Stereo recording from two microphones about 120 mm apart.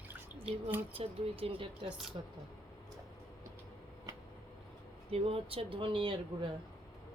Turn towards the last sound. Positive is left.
turn(degrees=-45)  # may be behind; listen again after turning